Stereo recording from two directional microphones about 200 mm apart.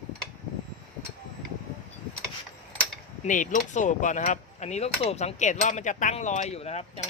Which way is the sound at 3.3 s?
40° left (ahead or behind).